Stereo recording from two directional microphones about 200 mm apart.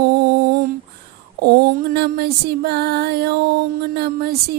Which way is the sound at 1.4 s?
55° right (ahead or behind).